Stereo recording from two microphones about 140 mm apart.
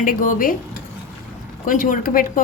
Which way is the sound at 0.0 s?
80° left.